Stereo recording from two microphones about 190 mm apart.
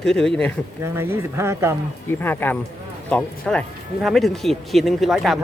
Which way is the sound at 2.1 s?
10° left (ahead or behind).